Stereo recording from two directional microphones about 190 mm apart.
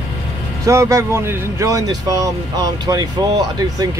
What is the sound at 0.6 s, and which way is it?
Speech, 15° right (ahead or behind).